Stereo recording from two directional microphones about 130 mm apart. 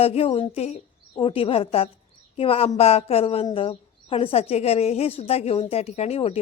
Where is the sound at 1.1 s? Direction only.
40° left (ahead or behind).